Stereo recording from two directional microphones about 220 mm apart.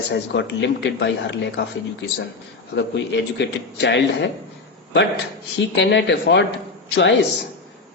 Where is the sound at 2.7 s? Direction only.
50° left (ahead or behind).